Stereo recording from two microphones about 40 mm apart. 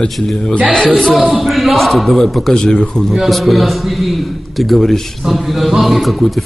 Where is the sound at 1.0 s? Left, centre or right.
Centre.